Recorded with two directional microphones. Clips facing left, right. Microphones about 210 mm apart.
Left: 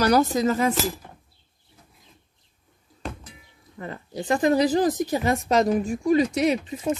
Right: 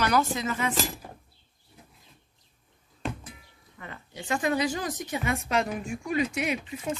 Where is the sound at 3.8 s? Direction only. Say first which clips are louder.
Left 9 dB; 35° left (ahead or behind).